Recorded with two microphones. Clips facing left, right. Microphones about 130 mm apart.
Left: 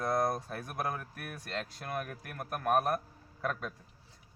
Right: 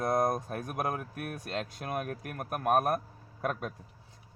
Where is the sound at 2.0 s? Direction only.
50° right (ahead or behind).